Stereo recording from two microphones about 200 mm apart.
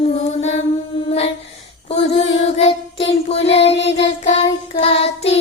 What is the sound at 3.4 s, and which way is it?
Child singing, 60° left (ahead or behind).